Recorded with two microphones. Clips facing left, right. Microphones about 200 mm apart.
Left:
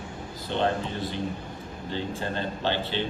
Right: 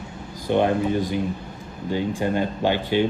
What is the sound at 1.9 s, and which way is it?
Speech, 10° right (ahead or behind).